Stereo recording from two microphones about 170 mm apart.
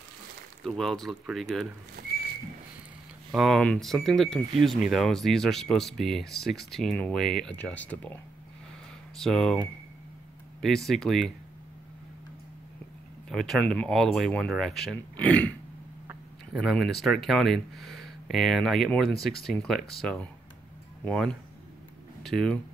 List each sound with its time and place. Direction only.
0.7 s speech: centre (ahead or behind)
2.0 s horse: 70° right (ahead or behind)
3.3 s speech: centre (ahead or behind)
13.3 s speech: centre (ahead or behind)
16.5 s speech: centre (ahead or behind)